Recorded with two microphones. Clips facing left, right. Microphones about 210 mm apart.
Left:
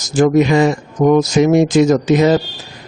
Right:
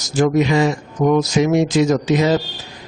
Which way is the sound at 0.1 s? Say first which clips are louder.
Left 4 dB; 50° left (ahead or behind).